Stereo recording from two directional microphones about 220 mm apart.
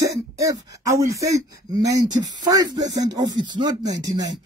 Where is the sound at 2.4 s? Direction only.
15° right (ahead or behind).